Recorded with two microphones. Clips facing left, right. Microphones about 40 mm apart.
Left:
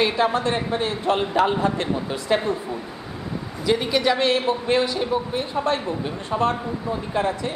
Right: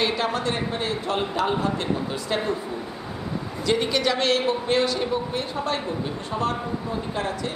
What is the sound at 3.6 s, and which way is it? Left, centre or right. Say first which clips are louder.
A man's voice: left 2 dB; centre.